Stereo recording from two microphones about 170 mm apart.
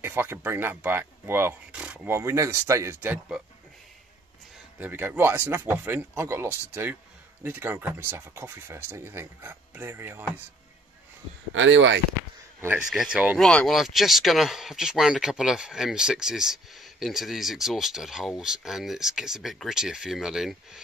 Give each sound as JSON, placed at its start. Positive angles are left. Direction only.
{"t": 0.0, "sound": "speech", "side_deg": -15}
{"t": 4.7, "sound": "speech", "side_deg": -10}
{"t": 11.6, "sound": "speech", "side_deg": -90}
{"t": 12.6, "sound": "speech", "side_deg": -5}